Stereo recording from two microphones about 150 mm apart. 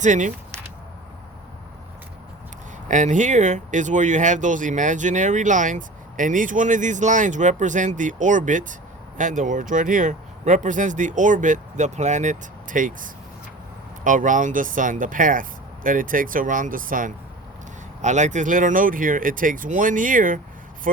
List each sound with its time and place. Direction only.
0.0 s speech: 55° right (ahead or behind)
2.9 s speech: 55° right (ahead or behind)
18.0 s speech: 55° right (ahead or behind)